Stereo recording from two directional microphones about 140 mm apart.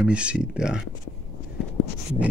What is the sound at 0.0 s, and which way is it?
Speech, 10° right (ahead or behind).